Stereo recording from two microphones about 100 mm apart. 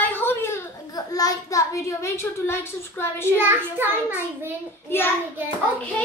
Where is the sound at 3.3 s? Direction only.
20° right (ahead or behind).